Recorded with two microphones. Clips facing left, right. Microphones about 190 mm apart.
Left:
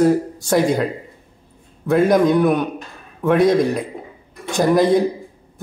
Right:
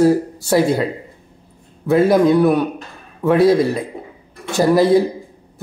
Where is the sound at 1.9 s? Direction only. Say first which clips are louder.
Right 2 dB; 5° right (ahead or behind).